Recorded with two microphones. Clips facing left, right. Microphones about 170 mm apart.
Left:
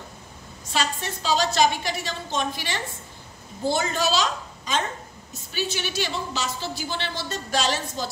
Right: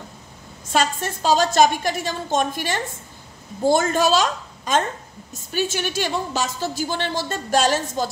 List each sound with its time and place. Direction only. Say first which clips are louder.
0.7 s a woman's voice: right 6 dB; 50° right (ahead or behind)